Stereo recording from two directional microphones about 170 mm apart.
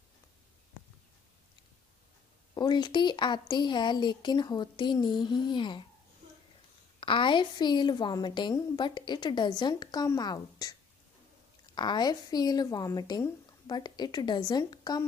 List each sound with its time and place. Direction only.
2.5 s a woman's voice: 25° left (ahead or behind)
7.0 s a woman's voice: 30° left (ahead or behind)